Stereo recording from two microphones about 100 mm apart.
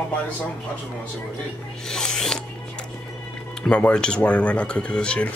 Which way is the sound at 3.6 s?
10° left (ahead or behind).